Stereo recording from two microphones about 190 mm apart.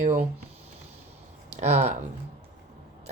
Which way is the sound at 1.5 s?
35° right (ahead or behind).